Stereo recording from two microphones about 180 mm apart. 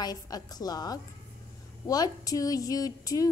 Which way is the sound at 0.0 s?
20° left (ahead or behind).